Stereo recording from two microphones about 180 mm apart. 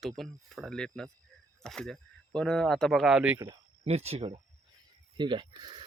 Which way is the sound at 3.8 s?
35° right (ahead or behind).